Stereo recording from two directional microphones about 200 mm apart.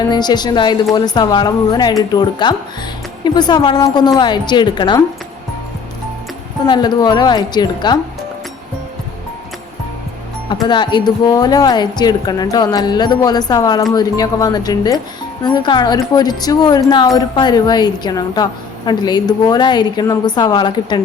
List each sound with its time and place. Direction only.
0.1 s a woman's voice: 20° left (ahead or behind)
6.7 s a woman's voice: 20° left (ahead or behind)
10.5 s a woman's voice: 20° left (ahead or behind)